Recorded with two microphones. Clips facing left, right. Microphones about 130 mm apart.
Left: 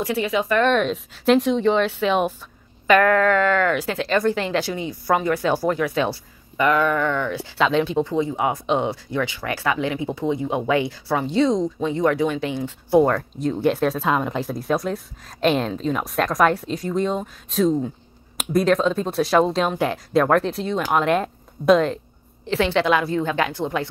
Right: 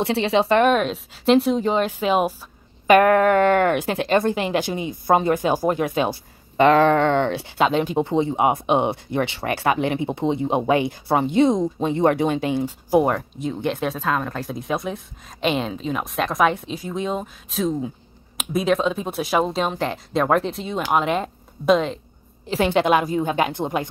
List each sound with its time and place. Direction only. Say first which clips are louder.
0.0 s speech: right 3 dB; 30° right (ahead or behind)
0.7 s speech: right 1 dB; 5° right (ahead or behind)
2.9 s speech: right 2 dB; 20° right (ahead or behind)
7.4 s speech: even; 45° right (ahead or behind)
8.0 s speech: right 2 dB; 25° right (ahead or behind)
13.4 s speech: left 4 dB; centre (ahead or behind)
14.0 s a woman's voice: left 2 dB; 15° left (ahead or behind)
14.8 s speech: left 2 dB; centre (ahead or behind)
22.7 s speech: right 3 dB; 20° right (ahead or behind)